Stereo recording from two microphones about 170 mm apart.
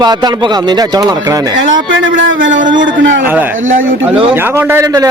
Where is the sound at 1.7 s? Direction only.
90° right.